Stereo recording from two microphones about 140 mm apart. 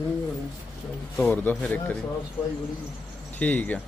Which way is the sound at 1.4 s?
10° left (ahead or behind).